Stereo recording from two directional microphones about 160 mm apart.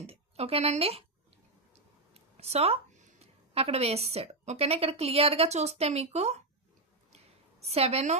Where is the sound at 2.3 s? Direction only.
40° right (ahead or behind).